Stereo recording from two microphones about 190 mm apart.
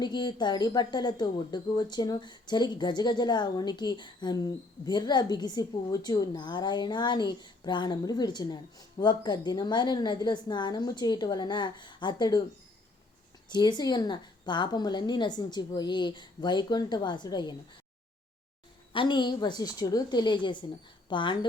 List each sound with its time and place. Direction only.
0.0 s a woman's voice: 25° left (ahead or behind)
13.5 s a woman's voice: 20° left (ahead or behind)
18.9 s a woman's voice: 25° left (ahead or behind)